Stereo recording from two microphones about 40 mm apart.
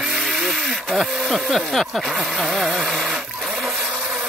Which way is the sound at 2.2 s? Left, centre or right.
Centre.